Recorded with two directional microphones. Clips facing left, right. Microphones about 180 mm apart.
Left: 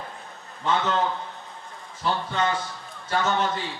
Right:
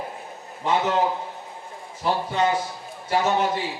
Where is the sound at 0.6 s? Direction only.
20° right (ahead or behind).